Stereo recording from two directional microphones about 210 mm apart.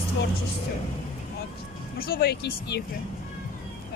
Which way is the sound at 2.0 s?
45° left (ahead or behind).